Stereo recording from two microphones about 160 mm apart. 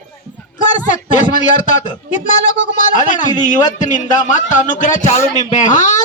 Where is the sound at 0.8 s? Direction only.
50° left (ahead or behind).